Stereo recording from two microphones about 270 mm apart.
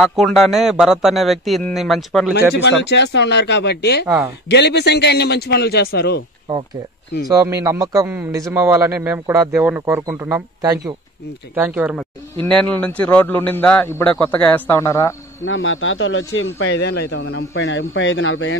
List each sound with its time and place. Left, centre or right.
0.0 s a man's voice: centre
2.3 s a man's voice: left
7.2 s a man's voice: centre
15.4 s a man's voice: left